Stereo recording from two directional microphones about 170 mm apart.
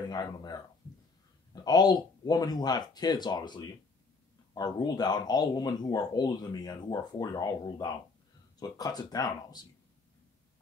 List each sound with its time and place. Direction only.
0.1 s speech: 25° left (ahead or behind)